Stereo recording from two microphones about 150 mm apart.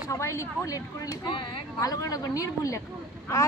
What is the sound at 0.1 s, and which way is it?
Speech, 20° left (ahead or behind).